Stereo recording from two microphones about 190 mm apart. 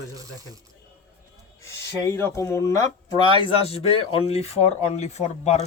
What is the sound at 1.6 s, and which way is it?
Speech, 15° left (ahead or behind).